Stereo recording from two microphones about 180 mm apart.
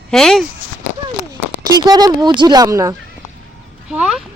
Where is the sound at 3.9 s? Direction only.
5° right (ahead or behind).